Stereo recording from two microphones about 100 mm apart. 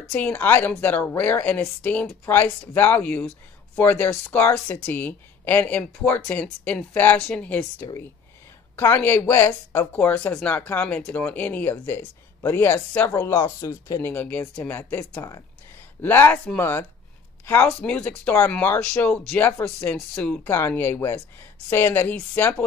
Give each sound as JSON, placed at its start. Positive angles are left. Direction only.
{"t": 0.1, "sound": "speech", "side_deg": 15}